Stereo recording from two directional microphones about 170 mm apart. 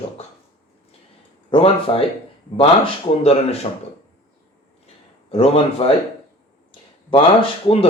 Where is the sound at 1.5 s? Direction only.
35° left (ahead or behind).